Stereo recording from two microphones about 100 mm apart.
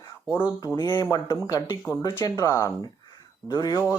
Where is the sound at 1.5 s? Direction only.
35° left (ahead or behind).